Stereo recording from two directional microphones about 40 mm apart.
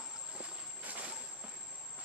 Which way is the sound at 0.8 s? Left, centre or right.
Right.